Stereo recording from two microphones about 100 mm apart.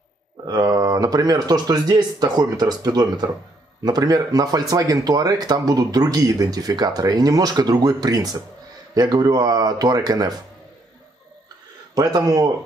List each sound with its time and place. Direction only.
0.5 s speech: 40° right (ahead or behind)
11.9 s speech: 40° right (ahead or behind)